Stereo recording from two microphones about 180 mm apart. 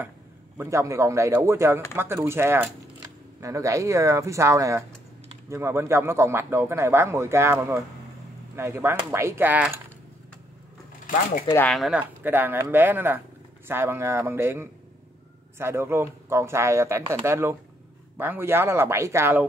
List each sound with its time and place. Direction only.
0.6 s a man's voice: 15° right (ahead or behind)
11.5 s a man's voice: 5° left (ahead or behind); by 19.4 s 15° right (ahead or behind)